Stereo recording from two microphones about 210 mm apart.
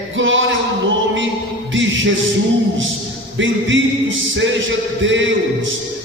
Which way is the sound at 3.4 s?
65° right (ahead or behind).